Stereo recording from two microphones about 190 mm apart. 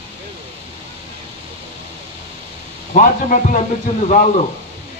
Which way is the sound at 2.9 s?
45° left (ahead or behind).